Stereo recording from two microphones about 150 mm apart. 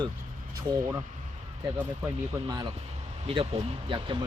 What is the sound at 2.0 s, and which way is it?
Speech, 25° right (ahead or behind).